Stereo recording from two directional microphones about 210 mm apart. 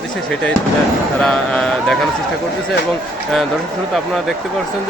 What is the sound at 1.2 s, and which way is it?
Speech, 5° left (ahead or behind).